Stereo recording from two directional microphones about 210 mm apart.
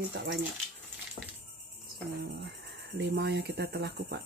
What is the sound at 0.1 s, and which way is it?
Speech, 55° right (ahead or behind).